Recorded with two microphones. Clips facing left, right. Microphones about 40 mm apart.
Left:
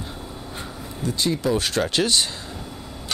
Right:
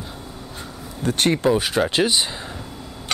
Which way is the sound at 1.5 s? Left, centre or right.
Centre.